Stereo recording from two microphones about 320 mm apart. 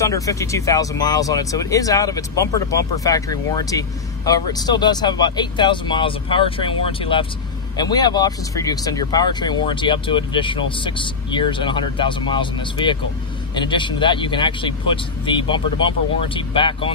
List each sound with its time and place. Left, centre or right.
0.0 s speech: centre